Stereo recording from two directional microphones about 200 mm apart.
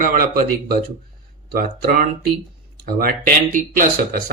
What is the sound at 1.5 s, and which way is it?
Speech, 45° right (ahead or behind).